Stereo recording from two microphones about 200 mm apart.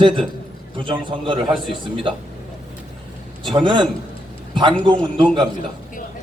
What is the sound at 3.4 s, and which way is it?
Speech, 25° right (ahead or behind).